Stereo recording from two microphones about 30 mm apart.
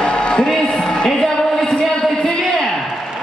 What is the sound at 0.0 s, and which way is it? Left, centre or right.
Music, left.